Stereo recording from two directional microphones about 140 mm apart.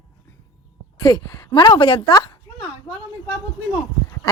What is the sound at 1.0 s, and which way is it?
A woman's voice, 30° left (ahead or behind).